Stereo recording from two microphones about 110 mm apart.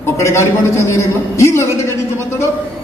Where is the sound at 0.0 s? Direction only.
25° left (ahead or behind).